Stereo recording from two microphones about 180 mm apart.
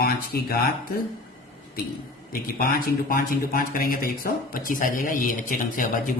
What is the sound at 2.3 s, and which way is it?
Speech, 55° left (ahead or behind).